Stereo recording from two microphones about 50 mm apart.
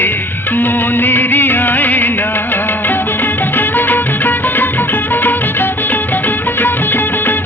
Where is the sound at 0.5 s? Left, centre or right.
Left.